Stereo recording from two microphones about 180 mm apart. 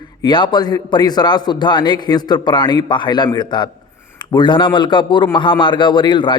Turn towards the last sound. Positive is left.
turn(degrees=25)  # may be behind; listen again after turning